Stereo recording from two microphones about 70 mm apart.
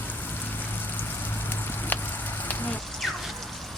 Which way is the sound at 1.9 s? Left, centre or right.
Left.